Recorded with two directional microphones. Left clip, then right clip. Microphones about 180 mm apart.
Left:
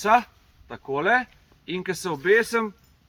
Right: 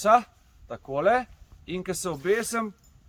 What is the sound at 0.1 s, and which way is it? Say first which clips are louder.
Speech: left 1 dB; 50° right (ahead or behind).